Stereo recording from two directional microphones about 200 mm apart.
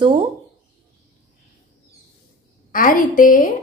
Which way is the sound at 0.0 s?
25° right (ahead or behind).